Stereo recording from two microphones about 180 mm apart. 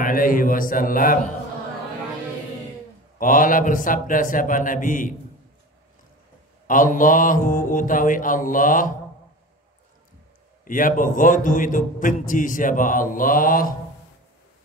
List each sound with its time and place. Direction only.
0.0 s a man's voice: 50° left (ahead or behind)
3.2 s a man's voice: 50° left (ahead or behind)
6.7 s a man's voice: 50° left (ahead or behind)
10.6 s a man's voice: 50° left (ahead or behind)